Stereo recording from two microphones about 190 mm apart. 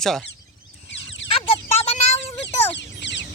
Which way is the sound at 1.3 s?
30° left (ahead or behind).